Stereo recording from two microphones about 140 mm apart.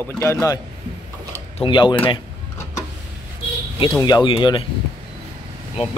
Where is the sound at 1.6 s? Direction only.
35° left (ahead or behind).